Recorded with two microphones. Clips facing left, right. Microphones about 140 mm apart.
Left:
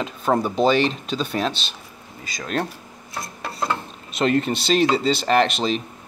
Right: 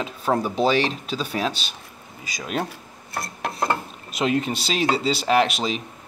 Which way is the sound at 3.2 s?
60° right (ahead or behind).